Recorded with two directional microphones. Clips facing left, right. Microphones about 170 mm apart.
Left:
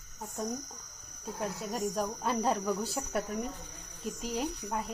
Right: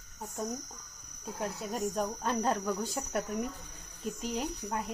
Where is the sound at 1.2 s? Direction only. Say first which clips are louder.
Even; centre (ahead or behind).